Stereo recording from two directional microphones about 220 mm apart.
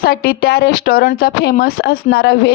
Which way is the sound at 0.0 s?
45° left (ahead or behind).